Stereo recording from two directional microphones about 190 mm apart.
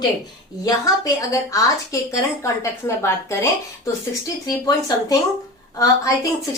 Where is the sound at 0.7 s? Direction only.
20° left (ahead or behind).